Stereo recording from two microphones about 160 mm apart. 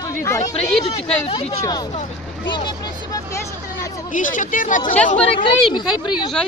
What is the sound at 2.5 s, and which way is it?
Vehicle, 30° left (ahead or behind).